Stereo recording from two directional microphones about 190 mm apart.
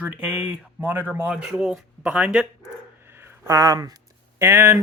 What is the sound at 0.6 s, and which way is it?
Speech, 10° right (ahead or behind).